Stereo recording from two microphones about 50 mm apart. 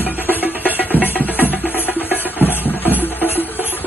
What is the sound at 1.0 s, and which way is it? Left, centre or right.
Music, left.